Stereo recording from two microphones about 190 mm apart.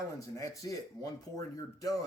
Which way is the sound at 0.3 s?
20° left (ahead or behind).